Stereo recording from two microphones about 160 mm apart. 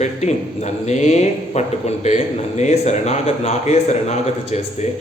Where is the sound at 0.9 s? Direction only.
45° left (ahead or behind).